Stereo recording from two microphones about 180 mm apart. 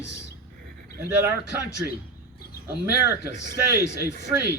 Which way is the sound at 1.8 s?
10° right (ahead or behind).